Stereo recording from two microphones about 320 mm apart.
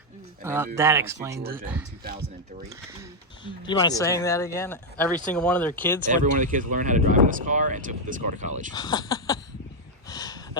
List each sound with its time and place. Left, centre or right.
0.4 s speech: centre
3.4 s speech: centre
6.1 s speech: right
8.7 s speech: centre
10.1 s a sound: centre